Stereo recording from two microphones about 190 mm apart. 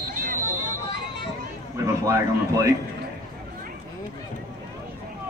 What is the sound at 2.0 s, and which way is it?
Speech, 15° right (ahead or behind).